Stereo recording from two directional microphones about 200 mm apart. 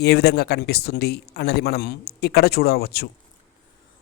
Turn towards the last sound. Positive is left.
turn(degrees=50)  # may be behind; listen again after turning